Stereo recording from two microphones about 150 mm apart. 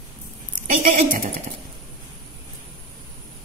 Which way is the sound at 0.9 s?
65° right (ahead or behind).